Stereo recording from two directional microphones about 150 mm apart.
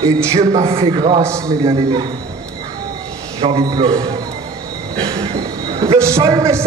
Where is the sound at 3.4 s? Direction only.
40° right (ahead or behind).